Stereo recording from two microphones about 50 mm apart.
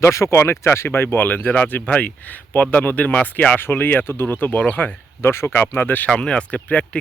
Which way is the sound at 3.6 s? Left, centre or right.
Left.